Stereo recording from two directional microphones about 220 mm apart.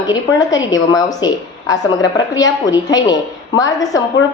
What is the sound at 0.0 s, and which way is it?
A woman's voice, 20° left (ahead or behind).